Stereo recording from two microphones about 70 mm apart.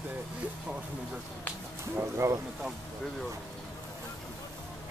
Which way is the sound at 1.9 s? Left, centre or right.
Right.